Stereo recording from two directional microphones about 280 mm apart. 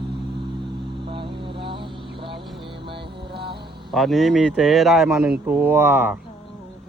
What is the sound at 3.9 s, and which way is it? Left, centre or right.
Speech, centre.